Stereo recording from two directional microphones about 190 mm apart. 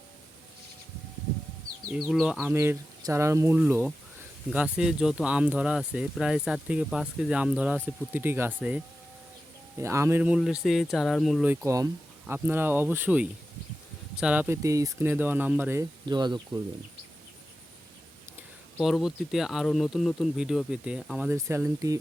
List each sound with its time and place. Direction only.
1.9 s speech: 5° right (ahead or behind)
2.6 s speech: 15° right (ahead or behind)
11.6 s speech: 15° right (ahead or behind)
18.8 s speech: centre (ahead or behind)